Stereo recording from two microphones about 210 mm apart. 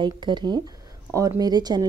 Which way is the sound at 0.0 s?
20° right (ahead or behind).